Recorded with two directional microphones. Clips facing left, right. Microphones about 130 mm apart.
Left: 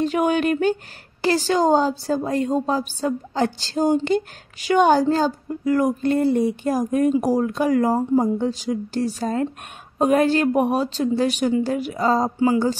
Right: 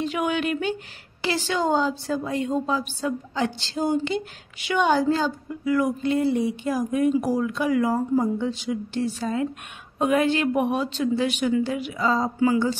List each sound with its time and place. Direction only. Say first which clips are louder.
0.0 s a woman's voice: left 5 dB; 45° left (ahead or behind)